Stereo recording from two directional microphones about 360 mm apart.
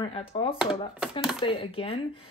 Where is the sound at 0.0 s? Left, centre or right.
Centre.